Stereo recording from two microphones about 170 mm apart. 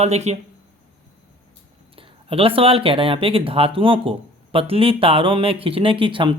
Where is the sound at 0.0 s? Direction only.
40° right (ahead or behind).